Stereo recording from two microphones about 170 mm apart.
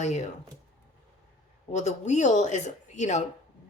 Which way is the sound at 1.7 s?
40° left (ahead or behind).